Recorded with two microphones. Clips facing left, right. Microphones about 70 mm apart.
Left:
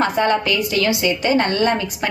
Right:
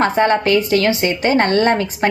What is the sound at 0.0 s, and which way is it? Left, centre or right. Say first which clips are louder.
A woman's voice: right 3 dB; right.